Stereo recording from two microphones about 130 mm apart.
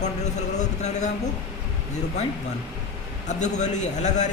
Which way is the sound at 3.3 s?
65° left (ahead or behind).